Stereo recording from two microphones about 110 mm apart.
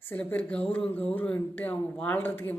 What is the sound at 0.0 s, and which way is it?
A woman's voice, 20° left (ahead or behind).